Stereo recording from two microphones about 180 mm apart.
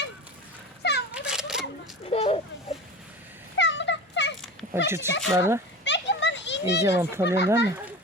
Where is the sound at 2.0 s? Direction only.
35° left (ahead or behind).